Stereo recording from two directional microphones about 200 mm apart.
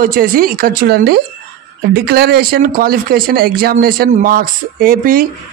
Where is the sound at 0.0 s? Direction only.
45° right (ahead or behind).